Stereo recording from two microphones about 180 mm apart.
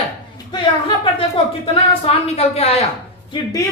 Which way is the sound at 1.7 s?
35° left (ahead or behind).